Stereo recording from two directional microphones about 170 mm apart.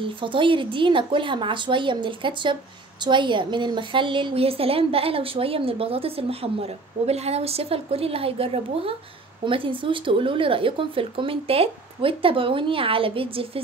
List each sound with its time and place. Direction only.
0.0 s a woman's voice: 30° right (ahead or behind)